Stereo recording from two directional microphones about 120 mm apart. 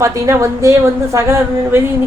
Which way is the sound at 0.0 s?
25° right (ahead or behind).